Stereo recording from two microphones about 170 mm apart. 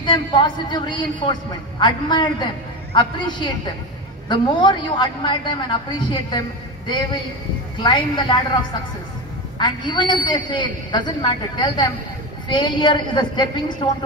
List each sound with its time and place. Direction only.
0.0 s a man's voice: 30° left (ahead or behind)
7.8 s a man's voice: 25° left (ahead or behind)
9.6 s a man's voice: 25° left (ahead or behind)